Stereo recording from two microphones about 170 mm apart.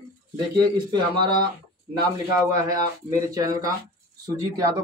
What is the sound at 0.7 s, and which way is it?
Speech, 30° right (ahead or behind).